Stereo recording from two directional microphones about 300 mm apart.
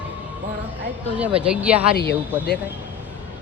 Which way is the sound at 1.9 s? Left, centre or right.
Left.